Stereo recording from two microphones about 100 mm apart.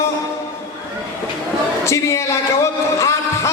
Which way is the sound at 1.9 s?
30° left (ahead or behind).